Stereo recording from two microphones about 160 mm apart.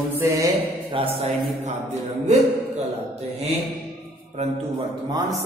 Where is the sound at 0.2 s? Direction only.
20° right (ahead or behind).